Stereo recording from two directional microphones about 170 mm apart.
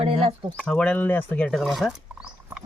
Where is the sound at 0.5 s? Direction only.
5° left (ahead or behind).